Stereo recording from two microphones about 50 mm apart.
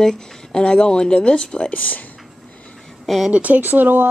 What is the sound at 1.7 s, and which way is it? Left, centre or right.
Speech, left.